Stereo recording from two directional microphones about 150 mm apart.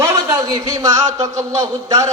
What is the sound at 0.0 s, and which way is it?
A man's voice, 25° right (ahead or behind).